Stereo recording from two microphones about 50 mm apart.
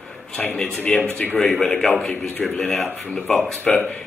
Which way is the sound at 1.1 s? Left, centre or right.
Left.